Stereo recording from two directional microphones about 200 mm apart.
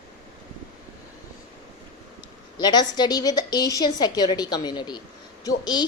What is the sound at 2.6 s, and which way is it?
A woman's voice, 20° left (ahead or behind).